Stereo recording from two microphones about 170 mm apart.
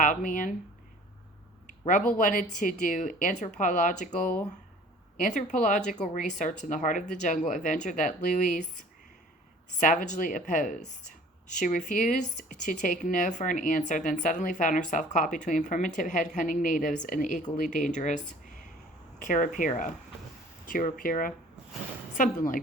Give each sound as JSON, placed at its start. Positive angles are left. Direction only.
{"t": 0.0, "sound": "a woman's voice", "side_deg": 50}
{"t": 1.9, "sound": "a woman's voice", "side_deg": 50}
{"t": 9.8, "sound": "a woman's voice", "side_deg": 50}